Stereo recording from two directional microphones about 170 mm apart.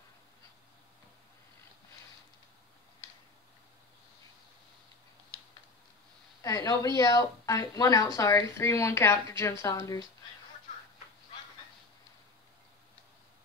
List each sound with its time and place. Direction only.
6.4 s a woman's voice: 20° left (ahead or behind)